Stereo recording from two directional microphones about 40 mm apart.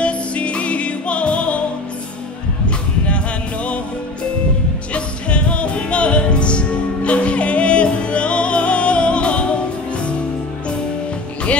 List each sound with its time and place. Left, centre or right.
0.0 s music: left
4.9 s music: left